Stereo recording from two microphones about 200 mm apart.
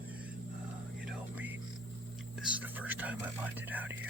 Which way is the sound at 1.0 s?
10° right (ahead or behind).